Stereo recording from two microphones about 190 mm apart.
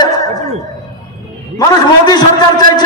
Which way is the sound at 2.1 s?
20° left (ahead or behind).